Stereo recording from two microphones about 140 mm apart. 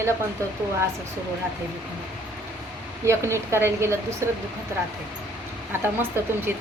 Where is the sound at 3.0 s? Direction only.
20° right (ahead or behind).